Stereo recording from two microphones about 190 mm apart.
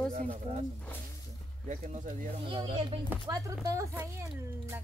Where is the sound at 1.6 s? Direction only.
40° right (ahead or behind).